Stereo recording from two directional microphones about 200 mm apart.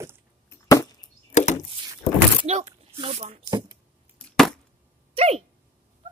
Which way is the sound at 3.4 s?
20° right (ahead or behind).